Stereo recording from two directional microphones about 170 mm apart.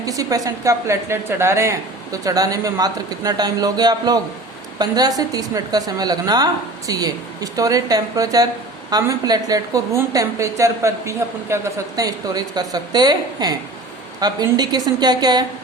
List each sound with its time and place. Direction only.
0.0 s a woman's voice: 20° right (ahead or behind)